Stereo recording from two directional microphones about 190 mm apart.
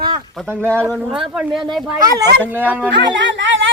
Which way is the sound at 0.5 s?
10° left (ahead or behind).